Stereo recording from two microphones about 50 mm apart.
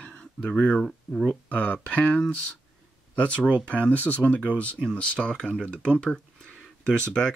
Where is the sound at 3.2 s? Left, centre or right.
Left.